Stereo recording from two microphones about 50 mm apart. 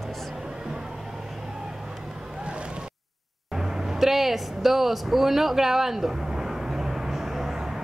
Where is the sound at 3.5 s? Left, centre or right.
Centre.